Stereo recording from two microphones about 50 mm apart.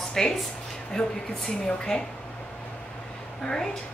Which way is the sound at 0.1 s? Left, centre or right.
Centre.